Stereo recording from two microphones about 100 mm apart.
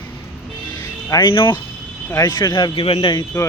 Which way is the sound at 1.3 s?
55° left (ahead or behind).